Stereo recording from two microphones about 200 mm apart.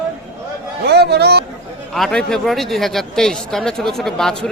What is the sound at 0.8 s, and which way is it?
Speech, 55° right (ahead or behind).